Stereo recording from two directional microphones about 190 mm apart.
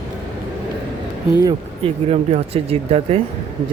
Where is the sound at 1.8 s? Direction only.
35° right (ahead or behind).